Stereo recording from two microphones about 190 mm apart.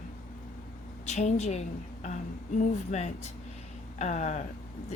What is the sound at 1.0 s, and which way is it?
Speech, 35° left (ahead or behind).